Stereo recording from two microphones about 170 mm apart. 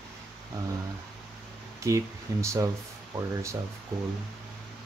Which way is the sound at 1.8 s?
15° right (ahead or behind).